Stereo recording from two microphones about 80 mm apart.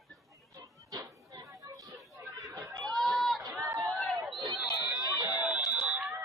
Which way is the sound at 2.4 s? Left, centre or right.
Right.